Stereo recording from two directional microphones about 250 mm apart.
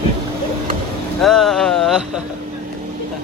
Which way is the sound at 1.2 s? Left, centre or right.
Centre.